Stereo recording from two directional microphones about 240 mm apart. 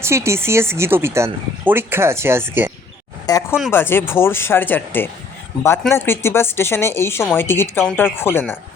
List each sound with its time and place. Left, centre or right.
0.0 s speech: centre
3.3 s speech: centre